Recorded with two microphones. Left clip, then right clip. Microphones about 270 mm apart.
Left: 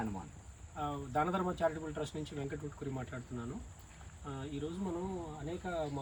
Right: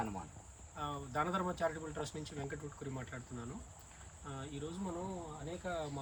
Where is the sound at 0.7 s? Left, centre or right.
Centre.